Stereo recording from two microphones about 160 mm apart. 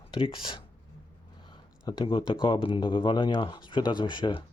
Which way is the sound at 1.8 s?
30° left (ahead or behind).